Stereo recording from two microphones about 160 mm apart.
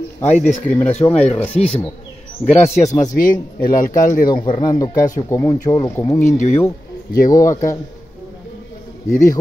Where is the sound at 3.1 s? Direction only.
60° left (ahead or behind).